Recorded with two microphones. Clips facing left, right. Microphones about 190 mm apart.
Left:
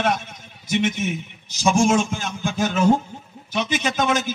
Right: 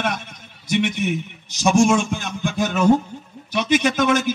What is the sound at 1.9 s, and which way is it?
A man's voice, 60° right (ahead or behind).